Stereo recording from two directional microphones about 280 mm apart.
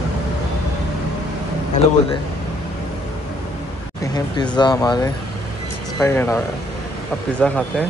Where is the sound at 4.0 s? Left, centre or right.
Centre.